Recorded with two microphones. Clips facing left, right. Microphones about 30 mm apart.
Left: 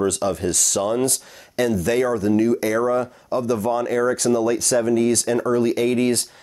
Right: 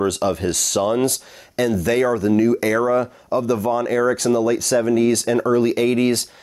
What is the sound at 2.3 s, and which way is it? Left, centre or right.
Speech, centre.